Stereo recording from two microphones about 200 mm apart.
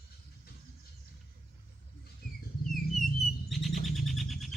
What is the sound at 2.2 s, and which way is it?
Bird, 45° left (ahead or behind).